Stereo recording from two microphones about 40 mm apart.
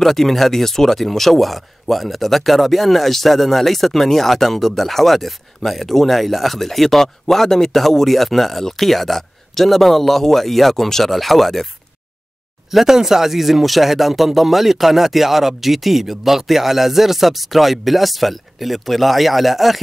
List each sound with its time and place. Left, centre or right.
0.0 s speech: centre
12.7 s speech: centre